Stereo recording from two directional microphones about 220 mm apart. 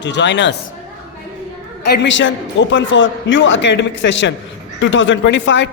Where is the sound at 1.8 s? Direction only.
50° left (ahead or behind).